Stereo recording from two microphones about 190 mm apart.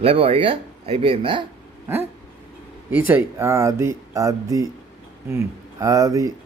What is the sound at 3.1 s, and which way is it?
Speech, 15° right (ahead or behind).